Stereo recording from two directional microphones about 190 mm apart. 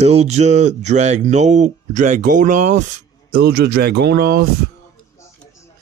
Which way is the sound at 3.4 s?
60° right (ahead or behind).